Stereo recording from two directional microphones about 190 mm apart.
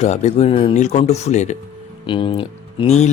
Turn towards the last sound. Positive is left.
turn(degrees=35)  # may be behind; listen again after turning